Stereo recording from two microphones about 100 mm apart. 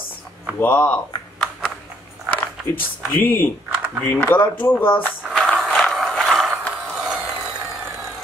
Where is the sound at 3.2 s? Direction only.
20° left (ahead or behind).